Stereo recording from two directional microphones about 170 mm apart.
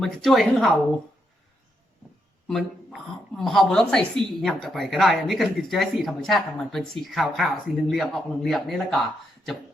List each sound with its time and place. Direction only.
0.0 s speech: centre (ahead or behind)
2.5 s speech: centre (ahead or behind)